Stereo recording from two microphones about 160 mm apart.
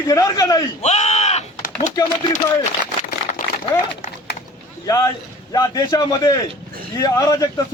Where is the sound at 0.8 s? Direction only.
45° left (ahead or behind).